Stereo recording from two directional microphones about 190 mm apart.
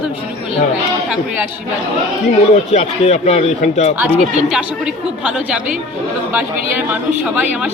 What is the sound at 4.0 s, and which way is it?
Speech, 5° right (ahead or behind).